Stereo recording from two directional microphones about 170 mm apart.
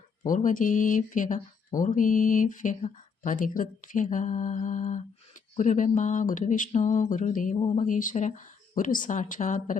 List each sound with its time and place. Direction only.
0.3 s speech: 50° left (ahead or behind)
7.5 s speech: 30° left (ahead or behind)
7.9 s speech: 50° left (ahead or behind)